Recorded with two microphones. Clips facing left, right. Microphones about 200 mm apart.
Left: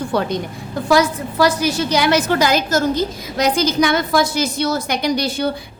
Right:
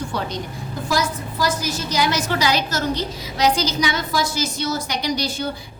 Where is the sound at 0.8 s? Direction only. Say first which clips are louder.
Left 8 dB; 65° left (ahead or behind).